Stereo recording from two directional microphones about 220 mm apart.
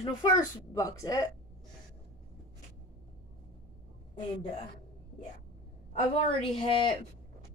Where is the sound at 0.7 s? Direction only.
15° left (ahead or behind).